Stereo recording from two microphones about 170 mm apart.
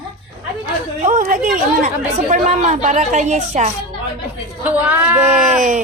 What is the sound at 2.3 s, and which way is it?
A woman's voice, 45° right (ahead or behind).